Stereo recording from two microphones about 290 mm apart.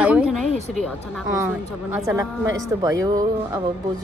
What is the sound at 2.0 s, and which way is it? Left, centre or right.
Speech, centre.